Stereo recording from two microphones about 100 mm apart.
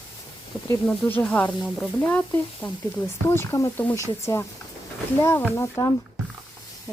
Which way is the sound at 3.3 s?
25° left (ahead or behind).